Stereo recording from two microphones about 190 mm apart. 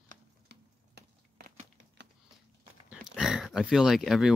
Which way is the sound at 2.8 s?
Centre (ahead or behind).